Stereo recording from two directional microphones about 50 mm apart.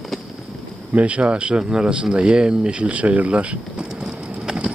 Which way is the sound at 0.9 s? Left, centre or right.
Right.